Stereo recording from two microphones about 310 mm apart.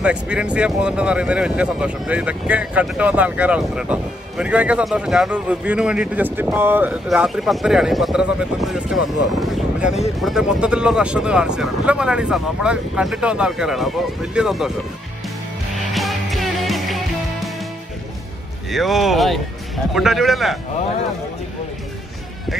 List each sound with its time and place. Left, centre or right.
0.0 s speech: centre
15.7 s music: centre
18.7 s speech: centre